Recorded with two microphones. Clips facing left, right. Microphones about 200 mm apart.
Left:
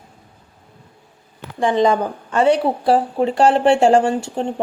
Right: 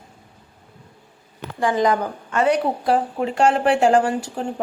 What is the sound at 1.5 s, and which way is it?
A woman's voice, 25° left (ahead or behind).